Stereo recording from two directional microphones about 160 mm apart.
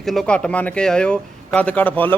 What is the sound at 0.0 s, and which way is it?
Speech, centre (ahead or behind).